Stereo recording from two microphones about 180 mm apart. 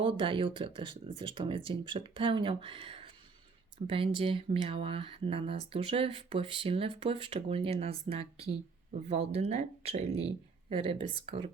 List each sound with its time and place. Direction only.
0.0 s speech: 30° right (ahead or behind)